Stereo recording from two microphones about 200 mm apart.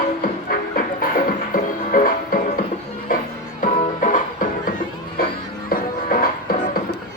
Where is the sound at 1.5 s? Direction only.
45° left (ahead or behind).